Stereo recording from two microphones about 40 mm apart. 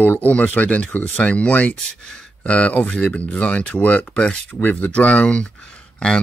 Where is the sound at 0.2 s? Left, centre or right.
Left.